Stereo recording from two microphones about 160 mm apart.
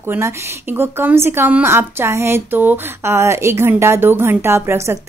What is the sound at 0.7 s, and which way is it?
A woman's voice, 15° right (ahead or behind).